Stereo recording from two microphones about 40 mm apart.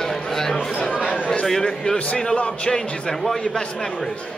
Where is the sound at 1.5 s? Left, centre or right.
Centre.